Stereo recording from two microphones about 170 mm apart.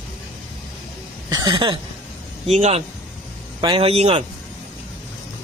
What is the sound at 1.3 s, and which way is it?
Speech, 25° right (ahead or behind).